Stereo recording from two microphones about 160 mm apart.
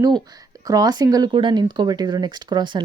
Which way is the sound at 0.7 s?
25° right (ahead or behind).